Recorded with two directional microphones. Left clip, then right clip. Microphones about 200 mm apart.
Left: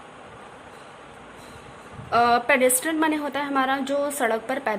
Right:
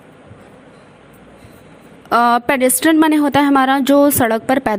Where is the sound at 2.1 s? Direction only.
45° right (ahead or behind).